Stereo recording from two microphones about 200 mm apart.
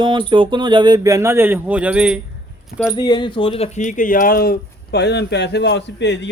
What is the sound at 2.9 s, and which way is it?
Speech, 20° left (ahead or behind).